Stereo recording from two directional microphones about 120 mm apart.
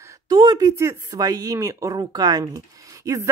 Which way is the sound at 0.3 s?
35° right (ahead or behind).